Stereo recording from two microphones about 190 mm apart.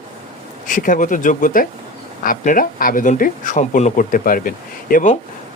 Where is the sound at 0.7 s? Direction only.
45° left (ahead or behind).